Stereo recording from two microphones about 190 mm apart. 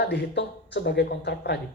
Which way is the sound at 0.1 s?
65° left (ahead or behind).